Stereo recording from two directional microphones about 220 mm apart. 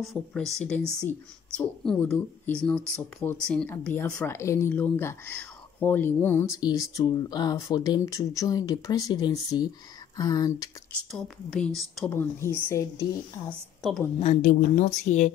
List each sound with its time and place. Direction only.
0.0 s speech: centre (ahead or behind)
11.1 s a woman's voice: 5° left (ahead or behind)
14.2 s a woman's voice: 35° left (ahead or behind)